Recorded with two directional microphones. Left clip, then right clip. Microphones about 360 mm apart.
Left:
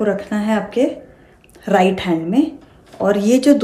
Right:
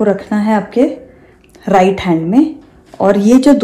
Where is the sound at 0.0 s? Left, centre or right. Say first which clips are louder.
Right 5 dB; centre.